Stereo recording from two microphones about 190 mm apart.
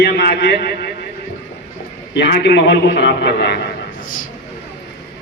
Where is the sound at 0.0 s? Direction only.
60° left (ahead or behind).